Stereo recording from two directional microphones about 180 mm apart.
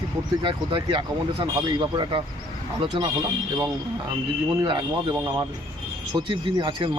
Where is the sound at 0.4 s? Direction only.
30° right (ahead or behind).